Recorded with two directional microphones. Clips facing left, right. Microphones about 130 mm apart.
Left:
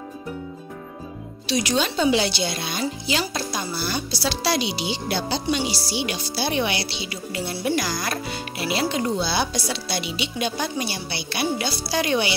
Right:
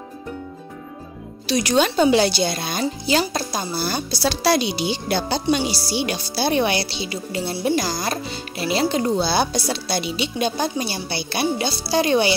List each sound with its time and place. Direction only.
1.5 s speech: 45° right (ahead or behind)